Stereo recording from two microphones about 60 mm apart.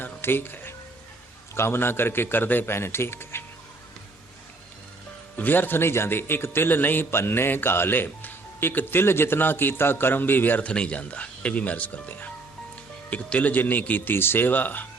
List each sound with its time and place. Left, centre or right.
0.0 s music: left
1.5 s a man's voice: left
5.4 s a man's voice: left
10.7 s speech: centre